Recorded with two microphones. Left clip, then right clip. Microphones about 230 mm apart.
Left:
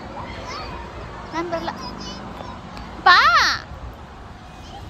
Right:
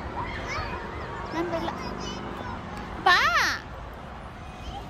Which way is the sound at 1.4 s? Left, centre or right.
Centre.